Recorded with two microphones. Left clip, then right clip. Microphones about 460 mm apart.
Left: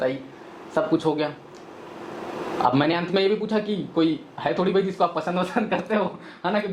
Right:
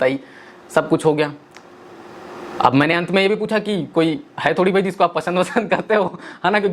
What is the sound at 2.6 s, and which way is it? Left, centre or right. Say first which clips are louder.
A man's voice: right 6 dB; right.